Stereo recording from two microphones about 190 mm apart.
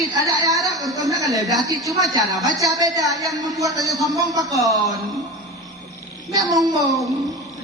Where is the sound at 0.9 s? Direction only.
20° right (ahead or behind).